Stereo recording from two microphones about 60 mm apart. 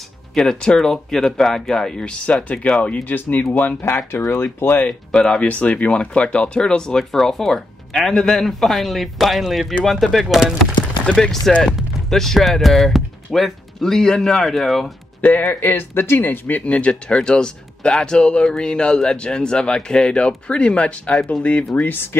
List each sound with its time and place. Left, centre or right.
0.3 s speech: centre; by 3.4 s left
3.8 s speech: left
5.1 s speech: centre
5.5 s speech: left; by 14.9 s centre
15.4 s speech: left
21.8 s speech: left